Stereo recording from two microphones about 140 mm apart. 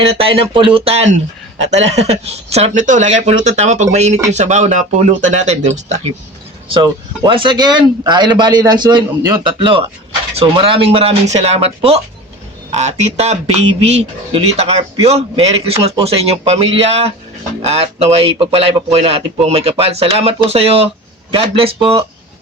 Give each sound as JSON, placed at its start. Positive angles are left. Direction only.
{"t": 0.0, "sound": "speech", "side_deg": -40}
{"t": 6.7, "sound": "speech", "side_deg": -35}